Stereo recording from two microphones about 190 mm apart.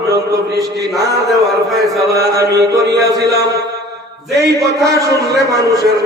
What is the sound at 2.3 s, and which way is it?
Music, 20° right (ahead or behind).